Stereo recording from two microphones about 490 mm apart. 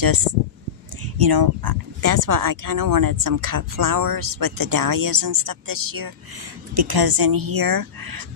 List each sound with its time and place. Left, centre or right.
1.0 s a woman's voice: right